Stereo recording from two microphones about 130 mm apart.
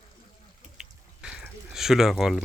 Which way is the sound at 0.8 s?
5° right (ahead or behind).